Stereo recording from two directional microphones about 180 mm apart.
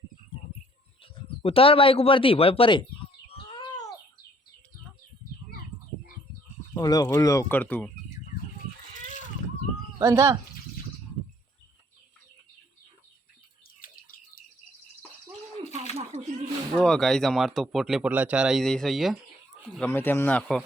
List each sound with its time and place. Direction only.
1.4 s speech: 30° left (ahead or behind)
3.2 s bird: 30° left (ahead or behind)
6.7 s speech: 20° left (ahead or behind)
10.0 s speech: 15° right (ahead or behind)
13.8 s a sound: 50° left (ahead or behind)
16.7 s speech: centre (ahead or behind)